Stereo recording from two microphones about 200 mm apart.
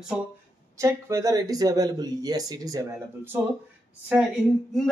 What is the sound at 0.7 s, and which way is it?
Speech, 15° right (ahead or behind).